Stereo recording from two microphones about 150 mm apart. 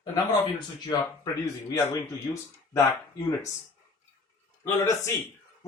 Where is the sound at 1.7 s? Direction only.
20° left (ahead or behind).